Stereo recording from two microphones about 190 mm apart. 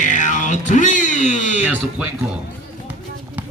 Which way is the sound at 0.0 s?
40° left (ahead or behind).